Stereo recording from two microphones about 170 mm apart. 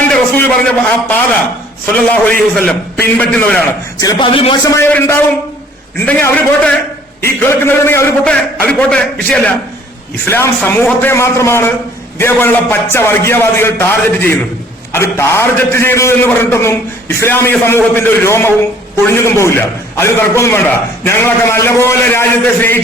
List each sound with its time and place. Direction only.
0.1 s a man's voice: 5° left (ahead or behind)
4.0 s speech: 30° left (ahead or behind)
4.7 s a man's voice: 10° left (ahead or behind)